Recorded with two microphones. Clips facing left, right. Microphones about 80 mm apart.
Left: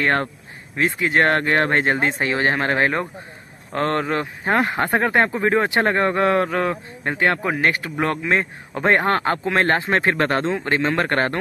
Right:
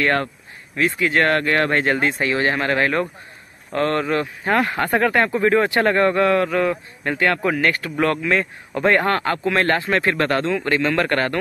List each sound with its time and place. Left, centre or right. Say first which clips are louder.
0.0 s speech: even; left